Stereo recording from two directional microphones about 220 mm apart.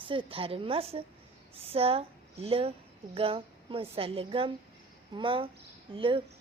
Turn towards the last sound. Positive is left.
turn(degrees=-25)  # may be behind; listen again after turning